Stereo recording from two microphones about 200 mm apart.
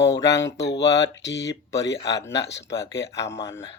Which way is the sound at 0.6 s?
60° left (ahead or behind).